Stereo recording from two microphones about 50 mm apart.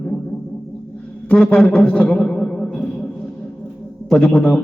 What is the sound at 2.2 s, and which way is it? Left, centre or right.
Music, centre.